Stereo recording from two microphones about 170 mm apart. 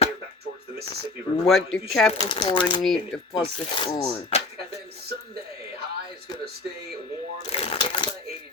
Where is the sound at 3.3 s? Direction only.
30° left (ahead or behind).